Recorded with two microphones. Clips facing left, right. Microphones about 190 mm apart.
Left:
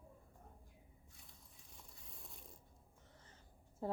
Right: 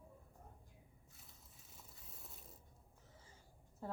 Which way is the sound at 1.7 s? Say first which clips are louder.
Even; 5° right (ahead or behind).